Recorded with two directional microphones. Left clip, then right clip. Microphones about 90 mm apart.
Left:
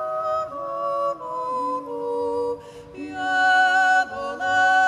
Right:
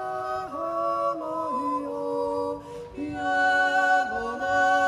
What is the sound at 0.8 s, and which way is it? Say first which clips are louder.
Music: left 2 dB; 45° left (ahead or behind).